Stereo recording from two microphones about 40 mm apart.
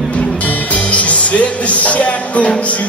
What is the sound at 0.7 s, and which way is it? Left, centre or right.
Speech, left.